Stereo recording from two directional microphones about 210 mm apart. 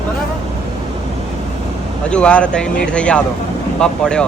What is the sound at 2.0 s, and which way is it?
Speech, 5° left (ahead or behind).